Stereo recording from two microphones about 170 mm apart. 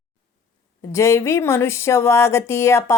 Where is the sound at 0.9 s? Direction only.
15° left (ahead or behind).